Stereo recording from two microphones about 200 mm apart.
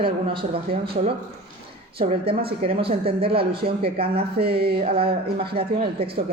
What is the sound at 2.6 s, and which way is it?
Speech, 30° right (ahead or behind).